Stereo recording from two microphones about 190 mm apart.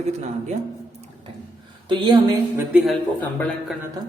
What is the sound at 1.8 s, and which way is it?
Speech, 25° right (ahead or behind).